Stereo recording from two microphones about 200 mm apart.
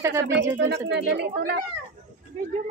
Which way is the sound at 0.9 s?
55° right (ahead or behind).